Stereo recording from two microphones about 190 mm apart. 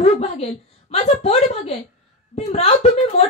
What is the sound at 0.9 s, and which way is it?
A woman's voice, 35° left (ahead or behind).